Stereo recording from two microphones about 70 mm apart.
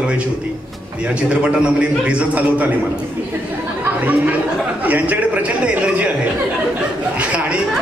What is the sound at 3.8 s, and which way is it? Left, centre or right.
A man's voice, right.